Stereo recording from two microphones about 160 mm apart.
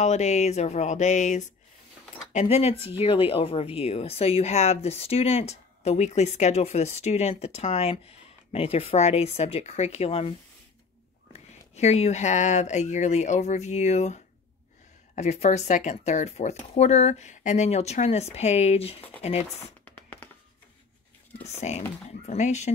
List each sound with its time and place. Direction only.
0.0 s speech: 45° left (ahead or behind)
11.3 s speech: 45° left (ahead or behind)
19.8 s music: 10° left (ahead or behind)
21.5 s speech: 45° left (ahead or behind)